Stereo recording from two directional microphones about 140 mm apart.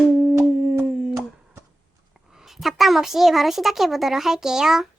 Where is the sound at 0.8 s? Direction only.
5° right (ahead or behind).